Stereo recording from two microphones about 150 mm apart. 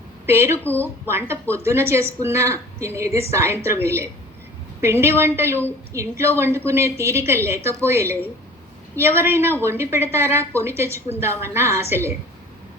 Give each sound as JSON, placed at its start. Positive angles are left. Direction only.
{"t": 0.3, "sound": "speech", "side_deg": -15}
{"t": 0.6, "sound": "speech", "side_deg": 10}
{"t": 1.0, "sound": "a woman's voice", "side_deg": -15}